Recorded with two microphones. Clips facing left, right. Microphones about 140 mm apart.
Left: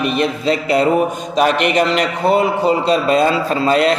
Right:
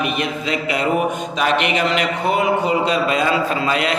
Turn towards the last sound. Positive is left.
turn(degrees=35)  # may be behind; listen again after turning